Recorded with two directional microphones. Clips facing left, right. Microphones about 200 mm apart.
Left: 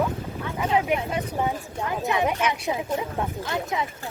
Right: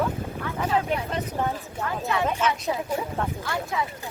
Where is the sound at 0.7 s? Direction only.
15° left (ahead or behind).